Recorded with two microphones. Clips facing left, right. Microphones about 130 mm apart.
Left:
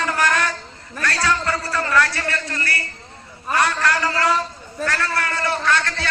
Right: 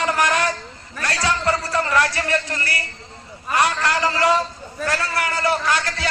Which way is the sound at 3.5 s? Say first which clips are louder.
Even; 20° right (ahead or behind).